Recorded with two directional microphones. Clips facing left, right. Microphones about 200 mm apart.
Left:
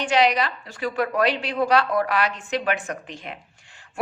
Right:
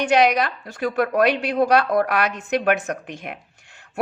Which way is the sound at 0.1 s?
50° right (ahead or behind).